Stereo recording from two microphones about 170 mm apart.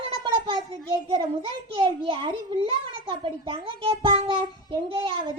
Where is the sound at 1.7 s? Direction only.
35° right (ahead or behind).